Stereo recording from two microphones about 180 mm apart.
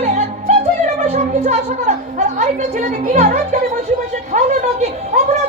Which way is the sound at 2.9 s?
50° right (ahead or behind).